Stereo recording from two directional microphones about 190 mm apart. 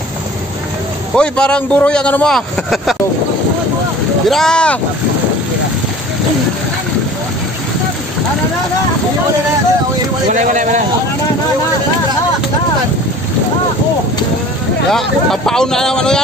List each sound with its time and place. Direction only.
1.1 s a man's voice: 5° left (ahead or behind)
4.3 s a man's voice: 5° left (ahead or behind)
10.3 s a man's voice: 40° right (ahead or behind)
14.9 s a man's voice: 5° left (ahead or behind)